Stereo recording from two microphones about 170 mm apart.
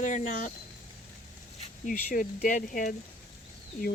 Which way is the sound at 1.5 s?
50° left (ahead or behind).